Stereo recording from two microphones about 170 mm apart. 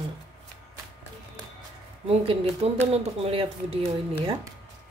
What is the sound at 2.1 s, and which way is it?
Speech, 35° right (ahead or behind).